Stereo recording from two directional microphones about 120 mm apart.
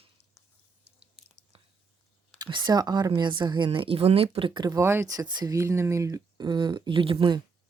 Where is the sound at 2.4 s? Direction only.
35° right (ahead or behind).